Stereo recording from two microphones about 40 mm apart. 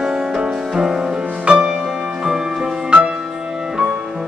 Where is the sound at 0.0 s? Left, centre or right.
Centre.